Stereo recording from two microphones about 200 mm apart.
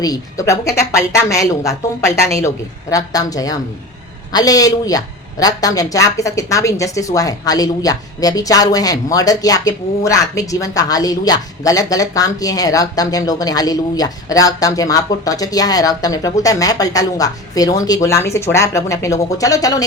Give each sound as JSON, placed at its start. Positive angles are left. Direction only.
{"t": 0.0, "sound": "a woman's voice", "side_deg": 15}